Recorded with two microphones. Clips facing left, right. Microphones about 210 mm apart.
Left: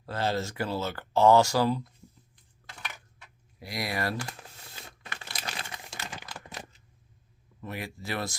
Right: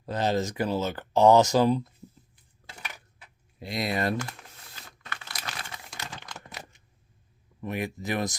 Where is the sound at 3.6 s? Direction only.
25° right (ahead or behind).